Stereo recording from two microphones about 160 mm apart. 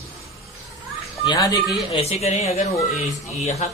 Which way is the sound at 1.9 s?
40° left (ahead or behind).